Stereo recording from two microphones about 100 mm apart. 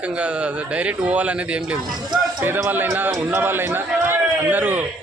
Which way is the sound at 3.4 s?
20° right (ahead or behind).